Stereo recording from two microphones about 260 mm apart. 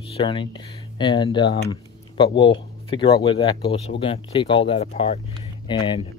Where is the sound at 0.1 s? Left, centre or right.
Centre.